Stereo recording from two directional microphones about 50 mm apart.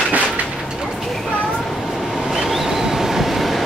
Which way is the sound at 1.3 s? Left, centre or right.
Centre.